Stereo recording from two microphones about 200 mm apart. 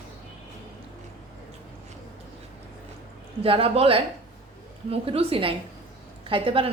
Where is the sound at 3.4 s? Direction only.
30° right (ahead or behind).